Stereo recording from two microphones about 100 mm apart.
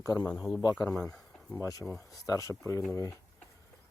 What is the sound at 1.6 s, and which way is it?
Speech, 30° left (ahead or behind).